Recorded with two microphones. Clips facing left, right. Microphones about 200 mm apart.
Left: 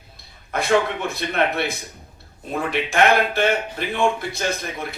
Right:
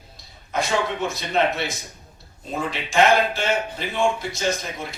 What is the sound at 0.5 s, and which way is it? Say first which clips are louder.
A man's voice: left 4 dB; 60° left (ahead or behind).